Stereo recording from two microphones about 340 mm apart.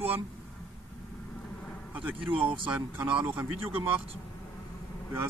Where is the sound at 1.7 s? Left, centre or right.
Centre.